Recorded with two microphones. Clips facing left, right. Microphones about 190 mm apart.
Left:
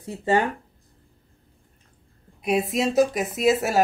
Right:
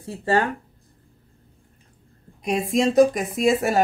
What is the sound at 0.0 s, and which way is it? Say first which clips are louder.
Speech: even; 20° left (ahead or behind).